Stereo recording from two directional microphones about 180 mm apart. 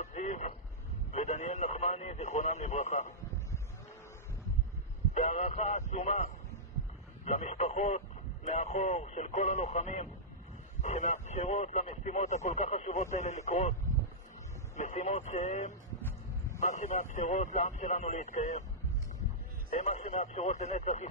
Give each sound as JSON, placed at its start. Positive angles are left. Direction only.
{"t": 0.0, "sound": "a sound", "side_deg": 40}
{"t": 1.1, "sound": "radio", "side_deg": 40}
{"t": 5.1, "sound": "speech", "side_deg": 40}
{"t": 14.8, "sound": "speech", "side_deg": 40}
{"t": 19.7, "sound": "speech", "side_deg": 40}